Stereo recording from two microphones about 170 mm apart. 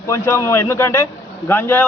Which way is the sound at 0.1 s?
20° left (ahead or behind).